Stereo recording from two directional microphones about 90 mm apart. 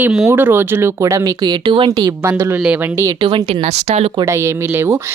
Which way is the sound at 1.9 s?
50° right (ahead or behind).